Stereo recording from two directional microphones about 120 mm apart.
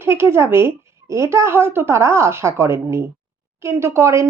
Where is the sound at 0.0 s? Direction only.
20° right (ahead or behind).